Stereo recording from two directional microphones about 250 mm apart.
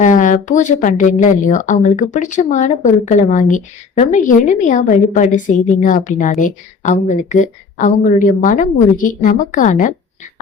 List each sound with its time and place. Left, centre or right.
0.0 s a woman's voice: left